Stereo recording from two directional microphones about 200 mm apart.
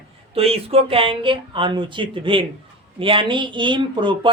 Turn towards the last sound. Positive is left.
turn(degrees=-25)  # may be behind; listen again after turning